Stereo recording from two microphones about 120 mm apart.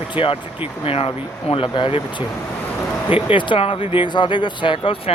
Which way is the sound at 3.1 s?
45° left (ahead or behind).